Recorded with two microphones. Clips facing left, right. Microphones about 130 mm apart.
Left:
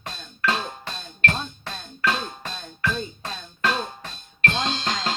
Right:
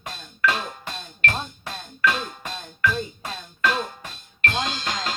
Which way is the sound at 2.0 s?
25° left (ahead or behind).